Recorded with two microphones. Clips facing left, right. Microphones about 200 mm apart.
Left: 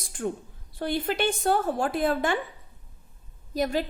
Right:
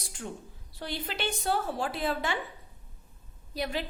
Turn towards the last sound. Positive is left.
turn(degrees=45)  # may be behind; listen again after turning